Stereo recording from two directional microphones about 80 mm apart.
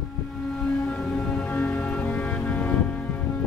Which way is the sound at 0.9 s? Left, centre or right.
Centre.